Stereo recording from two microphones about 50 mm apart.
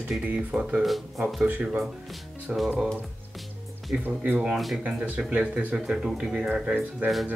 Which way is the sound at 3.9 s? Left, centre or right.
Centre.